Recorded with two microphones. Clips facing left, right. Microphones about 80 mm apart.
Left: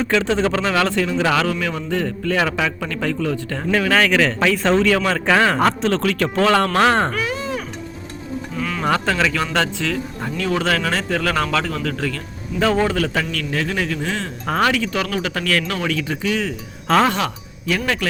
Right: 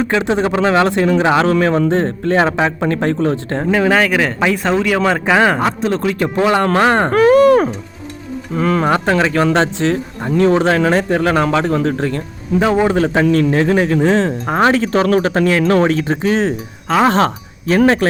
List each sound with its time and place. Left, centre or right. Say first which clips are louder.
0.0 s speech: right 3 dB; right
1.5 s speech: right 9 dB; right
1.9 s speech: right 6 dB; right
3.8 s a man's voice: right 2 dB; centre
4.9 s a man's voice: right 4 dB; right
7.1 s speech: right 15 dB; right
8.5 s speech: right 10 dB; right
8.9 s speech: right 5 dB; right
15.3 s speech: right 7 dB; right
15.6 s speech: right 10 dB; right